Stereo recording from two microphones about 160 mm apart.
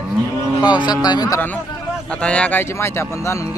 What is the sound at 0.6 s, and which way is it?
Speech, 25° left (ahead or behind).